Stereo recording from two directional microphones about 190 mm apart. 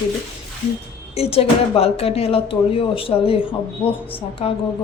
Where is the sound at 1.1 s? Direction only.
30° left (ahead or behind).